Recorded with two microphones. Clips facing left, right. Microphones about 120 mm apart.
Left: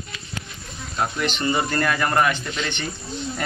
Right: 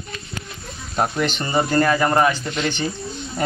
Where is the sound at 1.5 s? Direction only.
30° right (ahead or behind).